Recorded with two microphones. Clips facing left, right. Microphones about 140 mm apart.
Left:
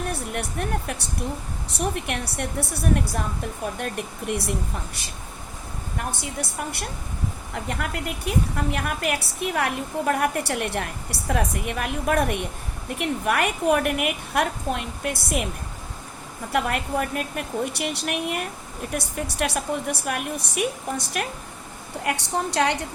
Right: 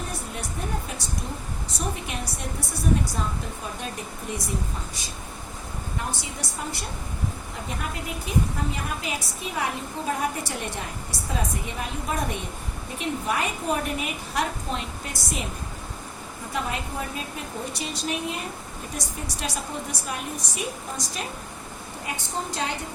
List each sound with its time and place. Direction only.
1.7 s a woman's voice: 65° left (ahead or behind)
7.5 s a woman's voice: 70° left (ahead or behind)
16.5 s a woman's voice: 65° left (ahead or behind)
22.0 s a woman's voice: 75° left (ahead or behind)